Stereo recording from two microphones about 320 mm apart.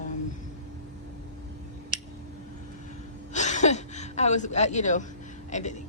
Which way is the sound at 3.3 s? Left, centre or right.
Left.